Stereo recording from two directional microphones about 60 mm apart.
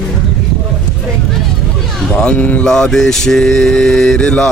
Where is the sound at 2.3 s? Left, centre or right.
Left.